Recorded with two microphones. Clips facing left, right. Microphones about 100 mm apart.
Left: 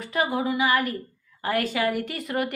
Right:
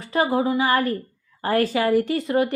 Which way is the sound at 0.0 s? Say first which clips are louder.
Right 4 dB; 30° right (ahead or behind).